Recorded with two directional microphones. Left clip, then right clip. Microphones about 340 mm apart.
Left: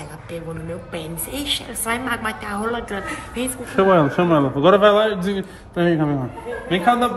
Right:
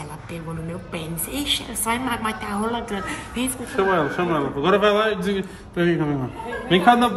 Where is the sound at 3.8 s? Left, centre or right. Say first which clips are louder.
Left 5 dB; centre.